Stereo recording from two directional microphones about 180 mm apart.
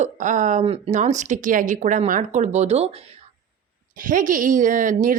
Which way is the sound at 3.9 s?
45° right (ahead or behind).